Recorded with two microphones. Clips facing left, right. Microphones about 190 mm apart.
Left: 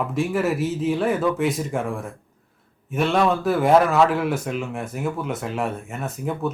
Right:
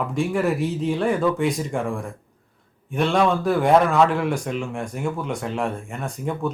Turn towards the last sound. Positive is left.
turn(degrees=5)  # may be behind; listen again after turning